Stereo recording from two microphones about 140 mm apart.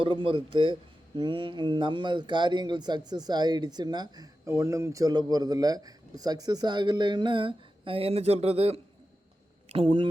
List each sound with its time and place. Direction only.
0.0 s speech: 40° right (ahead or behind)